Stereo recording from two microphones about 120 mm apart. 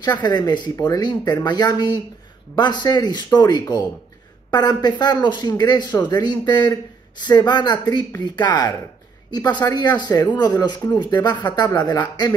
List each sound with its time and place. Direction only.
0.0 s speech: 35° left (ahead or behind)